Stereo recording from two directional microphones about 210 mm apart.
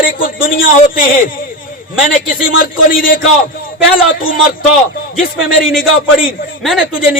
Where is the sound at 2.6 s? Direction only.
40° left (ahead or behind).